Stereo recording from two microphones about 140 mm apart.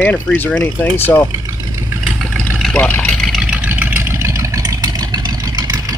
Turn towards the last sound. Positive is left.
turn(degrees=-25)  # may be behind; listen again after turning